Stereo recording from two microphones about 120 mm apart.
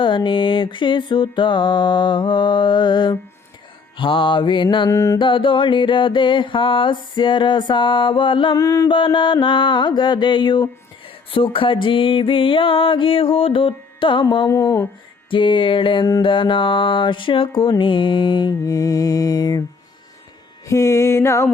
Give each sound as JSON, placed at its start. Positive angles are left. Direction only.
{"t": 0.0, "sound": "mantra", "side_deg": 45}
{"t": 4.9, "sound": "music", "side_deg": 25}
{"t": 5.2, "sound": "music", "side_deg": 45}
{"t": 8.5, "sound": "music", "side_deg": 30}
{"t": 8.9, "sound": "mantra", "side_deg": 45}
{"t": 11.3, "sound": "music", "side_deg": 50}
{"t": 15.3, "sound": "music", "side_deg": 45}
{"t": 20.7, "sound": "music", "side_deg": 25}